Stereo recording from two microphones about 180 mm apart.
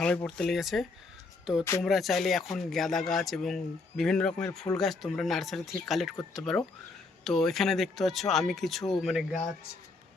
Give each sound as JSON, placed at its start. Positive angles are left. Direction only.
{"t": 0.0, "sound": "speech", "side_deg": 5}